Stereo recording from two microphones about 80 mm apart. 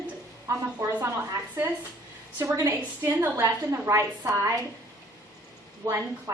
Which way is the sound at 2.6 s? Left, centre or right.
Right.